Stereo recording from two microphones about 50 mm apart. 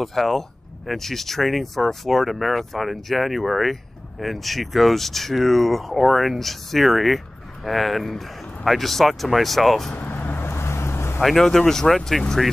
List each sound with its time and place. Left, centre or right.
0.0 s speech: centre
9.9 s vehicle: left
11.1 s speech: centre